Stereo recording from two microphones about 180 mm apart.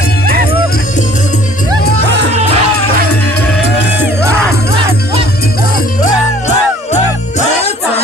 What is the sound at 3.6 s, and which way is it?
Music, 65° left (ahead or behind).